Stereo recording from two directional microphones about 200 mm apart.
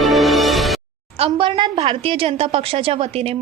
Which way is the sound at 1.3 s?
25° right (ahead or behind).